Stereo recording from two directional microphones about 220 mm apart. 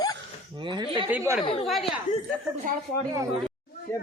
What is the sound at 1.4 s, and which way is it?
Speech, 25° left (ahead or behind).